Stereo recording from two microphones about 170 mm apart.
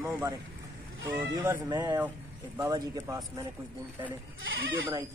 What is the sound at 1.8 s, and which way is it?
Speech, 10° right (ahead or behind).